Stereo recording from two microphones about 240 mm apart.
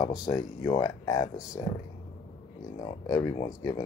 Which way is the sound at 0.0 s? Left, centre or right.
Centre.